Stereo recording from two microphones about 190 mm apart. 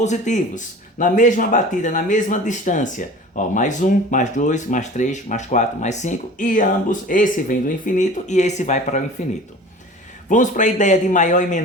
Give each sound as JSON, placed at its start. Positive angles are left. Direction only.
{"t": 0.0, "sound": "speech", "side_deg": 40}